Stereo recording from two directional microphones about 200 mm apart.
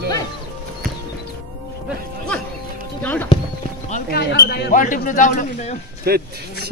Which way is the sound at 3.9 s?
55° left (ahead or behind).